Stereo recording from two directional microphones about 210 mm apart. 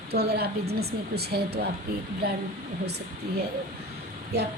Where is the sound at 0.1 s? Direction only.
50° right (ahead or behind).